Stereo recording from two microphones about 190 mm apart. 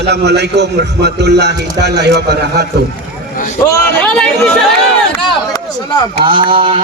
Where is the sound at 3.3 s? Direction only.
45° left (ahead or behind).